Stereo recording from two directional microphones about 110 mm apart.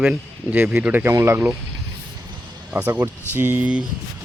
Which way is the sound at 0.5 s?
20° right (ahead or behind).